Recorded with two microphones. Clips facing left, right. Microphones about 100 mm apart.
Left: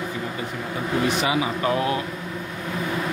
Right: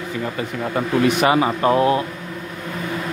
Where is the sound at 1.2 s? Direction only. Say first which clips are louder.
Right 6 dB; 50° right (ahead or behind).